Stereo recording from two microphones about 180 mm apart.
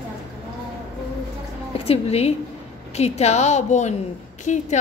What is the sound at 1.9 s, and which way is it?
A woman's voice, 35° left (ahead or behind).